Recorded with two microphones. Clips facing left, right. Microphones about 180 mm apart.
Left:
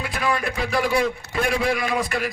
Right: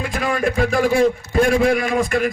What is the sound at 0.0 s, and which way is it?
A woman's voice, 45° right (ahead or behind).